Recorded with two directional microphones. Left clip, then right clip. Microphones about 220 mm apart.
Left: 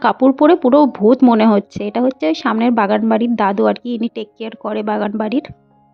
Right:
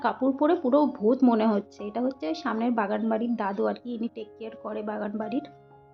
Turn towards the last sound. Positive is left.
turn(degrees=40)  # may be behind; listen again after turning